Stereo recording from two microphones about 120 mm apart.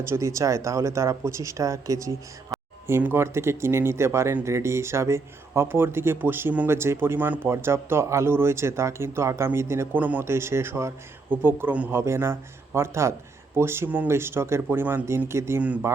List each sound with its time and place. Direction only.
0.0 s speech: 25° right (ahead or behind)
2.5 s a sound: centre (ahead or behind)
2.8 s speech: 20° right (ahead or behind)